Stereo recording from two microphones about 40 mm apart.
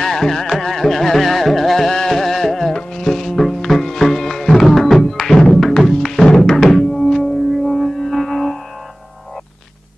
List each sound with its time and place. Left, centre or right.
0.0 s carnatic music: centre
2.7 s music: centre